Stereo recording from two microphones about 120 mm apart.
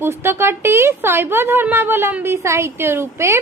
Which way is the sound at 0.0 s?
20° right (ahead or behind).